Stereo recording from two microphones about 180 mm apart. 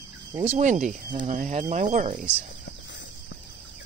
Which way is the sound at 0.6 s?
45° right (ahead or behind).